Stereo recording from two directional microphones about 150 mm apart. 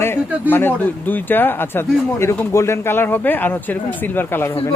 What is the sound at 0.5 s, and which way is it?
Speech, 15° left (ahead or behind).